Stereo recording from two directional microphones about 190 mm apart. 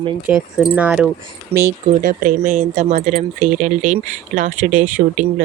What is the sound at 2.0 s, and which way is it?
Speech, 45° right (ahead or behind).